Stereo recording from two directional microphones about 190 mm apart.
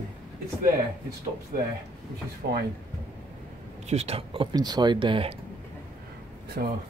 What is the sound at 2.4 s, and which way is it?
Speech, 60° right (ahead or behind).